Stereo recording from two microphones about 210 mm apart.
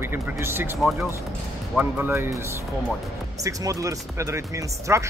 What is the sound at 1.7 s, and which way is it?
Speech, 10° right (ahead or behind).